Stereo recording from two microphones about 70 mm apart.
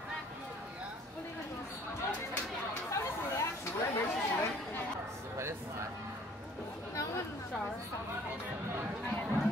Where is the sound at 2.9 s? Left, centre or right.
Left.